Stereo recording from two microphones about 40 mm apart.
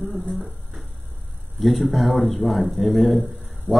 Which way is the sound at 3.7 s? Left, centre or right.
Right.